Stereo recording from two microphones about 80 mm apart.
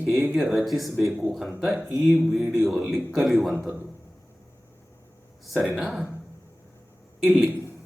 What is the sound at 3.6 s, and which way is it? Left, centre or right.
Speech, right.